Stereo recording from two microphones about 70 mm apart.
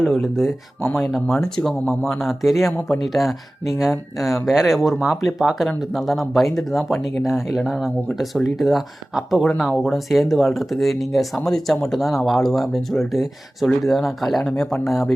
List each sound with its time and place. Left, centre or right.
0.0 s speech: centre
0.8 s speech: left
1.0 s speech: centre